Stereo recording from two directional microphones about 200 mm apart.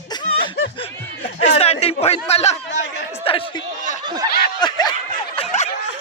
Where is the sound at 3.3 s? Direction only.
25° left (ahead or behind).